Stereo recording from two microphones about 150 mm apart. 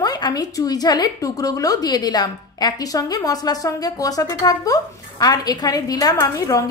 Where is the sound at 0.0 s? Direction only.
25° left (ahead or behind).